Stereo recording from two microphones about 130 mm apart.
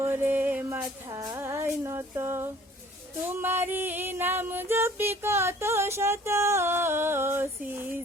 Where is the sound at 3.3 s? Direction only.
15° right (ahead or behind).